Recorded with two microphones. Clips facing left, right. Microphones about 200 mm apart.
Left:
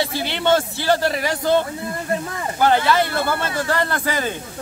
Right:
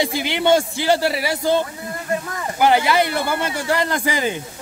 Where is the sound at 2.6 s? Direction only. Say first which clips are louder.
Right 1 dB; 15° right (ahead or behind).